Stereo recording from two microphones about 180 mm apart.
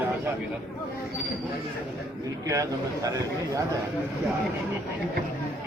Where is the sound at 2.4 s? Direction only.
20° right (ahead or behind).